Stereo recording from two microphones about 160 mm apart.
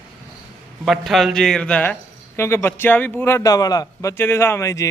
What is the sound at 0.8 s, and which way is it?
A man's voice, centre (ahead or behind).